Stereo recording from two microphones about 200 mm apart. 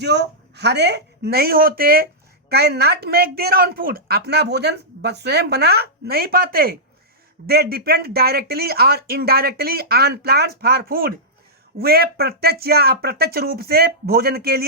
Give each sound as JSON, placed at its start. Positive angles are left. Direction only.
{"t": 0.0, "sound": "a woman's voice", "side_deg": -55}